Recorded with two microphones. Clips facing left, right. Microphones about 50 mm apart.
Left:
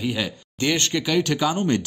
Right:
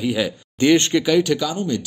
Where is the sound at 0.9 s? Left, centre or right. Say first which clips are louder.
Right 5 dB; centre.